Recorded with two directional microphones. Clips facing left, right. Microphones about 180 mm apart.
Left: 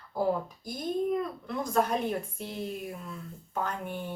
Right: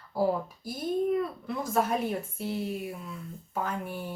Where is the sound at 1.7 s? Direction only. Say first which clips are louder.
Even; 5° right (ahead or behind).